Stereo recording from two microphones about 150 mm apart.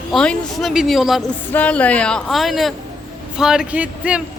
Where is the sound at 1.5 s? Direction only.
10° left (ahead or behind); by 4.2 s 10° right (ahead or behind).